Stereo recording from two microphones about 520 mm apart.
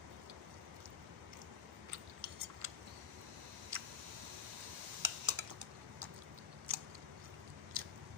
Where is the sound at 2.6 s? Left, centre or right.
Right.